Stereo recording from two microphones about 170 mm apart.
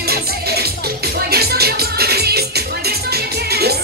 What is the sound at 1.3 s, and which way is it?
Music, 70° right (ahead or behind).